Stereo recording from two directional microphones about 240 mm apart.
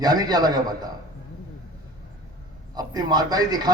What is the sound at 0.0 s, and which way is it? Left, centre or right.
Speech, centre.